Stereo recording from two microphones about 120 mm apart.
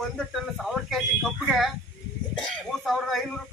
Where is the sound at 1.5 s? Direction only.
Centre (ahead or behind).